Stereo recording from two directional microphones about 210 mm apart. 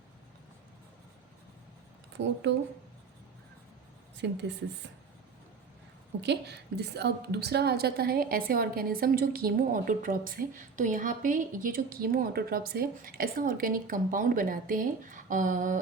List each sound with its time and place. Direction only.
2.1 s speech: 55° right (ahead or behind)
4.2 s speech: 55° right (ahead or behind)
6.2 s a woman's voice: 55° right (ahead or behind); by 15.8 s 40° right (ahead or behind)